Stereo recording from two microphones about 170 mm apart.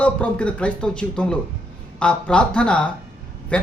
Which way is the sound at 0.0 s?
5° left (ahead or behind).